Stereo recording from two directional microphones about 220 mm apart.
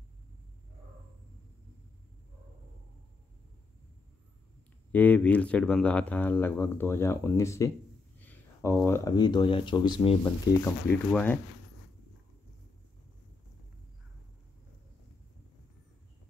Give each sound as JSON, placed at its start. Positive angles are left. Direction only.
{"t": 4.9, "sound": "speech", "side_deg": 5}
{"t": 11.1, "sound": "speech", "side_deg": 5}